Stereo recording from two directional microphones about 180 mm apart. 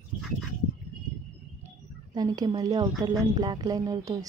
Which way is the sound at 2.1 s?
20° right (ahead or behind).